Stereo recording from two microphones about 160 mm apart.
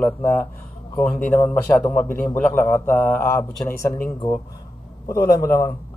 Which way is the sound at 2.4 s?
15° left (ahead or behind).